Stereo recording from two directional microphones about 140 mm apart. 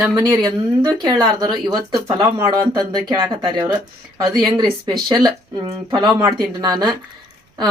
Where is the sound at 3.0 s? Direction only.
35° right (ahead or behind).